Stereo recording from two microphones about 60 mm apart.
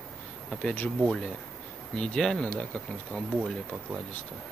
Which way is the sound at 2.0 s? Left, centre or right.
Centre.